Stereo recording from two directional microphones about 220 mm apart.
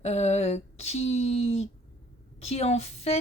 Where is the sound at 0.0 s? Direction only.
30° left (ahead or behind).